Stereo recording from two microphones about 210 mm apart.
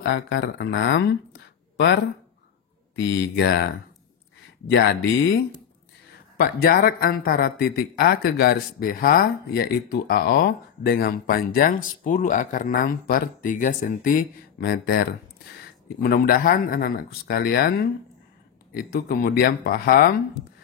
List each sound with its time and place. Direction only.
0.0 s speech: 60° left (ahead or behind)
3.0 s speech: 60° left (ahead or behind)
4.7 s speech: 55° left (ahead or behind)